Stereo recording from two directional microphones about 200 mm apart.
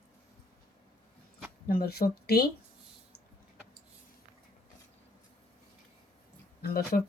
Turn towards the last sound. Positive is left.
turn(degrees=50)  # may be behind; listen again after turning